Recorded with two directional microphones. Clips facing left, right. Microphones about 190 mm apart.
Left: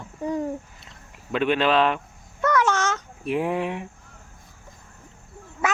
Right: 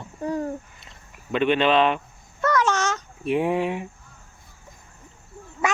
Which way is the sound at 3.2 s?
Centre (ahead or behind).